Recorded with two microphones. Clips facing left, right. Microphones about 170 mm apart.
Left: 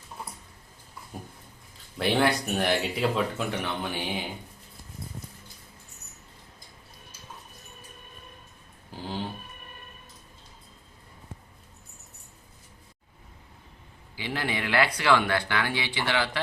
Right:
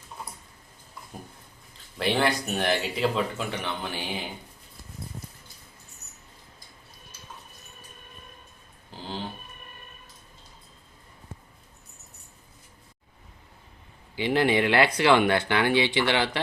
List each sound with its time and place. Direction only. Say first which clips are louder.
2.0 s speech: left 1 dB; centre (ahead or behind)
14.2 s speech: right 9 dB; 20° right (ahead or behind)